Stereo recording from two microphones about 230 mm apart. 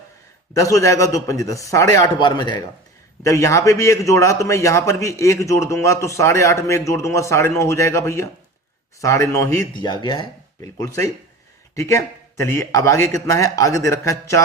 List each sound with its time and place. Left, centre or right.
0.5 s a man's voice: centre